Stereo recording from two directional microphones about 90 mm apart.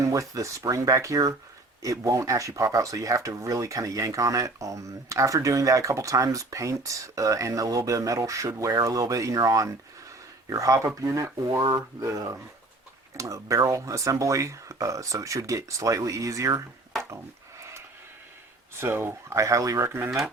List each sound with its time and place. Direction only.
0.0 s speech: 40° right (ahead or behind)
17.6 s a sound: 30° right (ahead or behind)
18.8 s speech: 25° right (ahead or behind)
20.1 s speech: centre (ahead or behind)